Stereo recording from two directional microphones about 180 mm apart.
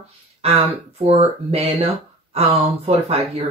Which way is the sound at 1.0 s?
35° right (ahead or behind).